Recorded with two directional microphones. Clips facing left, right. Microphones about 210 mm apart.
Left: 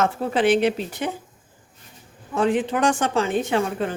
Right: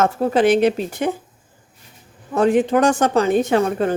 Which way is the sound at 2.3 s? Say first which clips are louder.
Right 6 dB; 40° right (ahead or behind).